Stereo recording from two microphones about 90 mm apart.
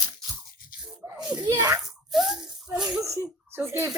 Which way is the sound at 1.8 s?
5° right (ahead or behind).